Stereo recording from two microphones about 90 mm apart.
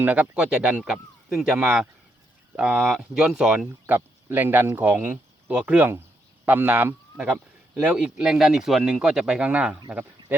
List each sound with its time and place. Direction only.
0.0 s speech: 15° right (ahead or behind)
3.8 s speech: 20° right (ahead or behind)